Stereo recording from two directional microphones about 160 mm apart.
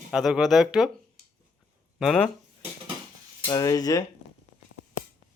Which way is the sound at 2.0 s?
Centre (ahead or behind).